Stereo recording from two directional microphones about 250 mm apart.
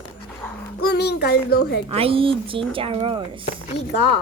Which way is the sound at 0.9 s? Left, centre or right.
Left.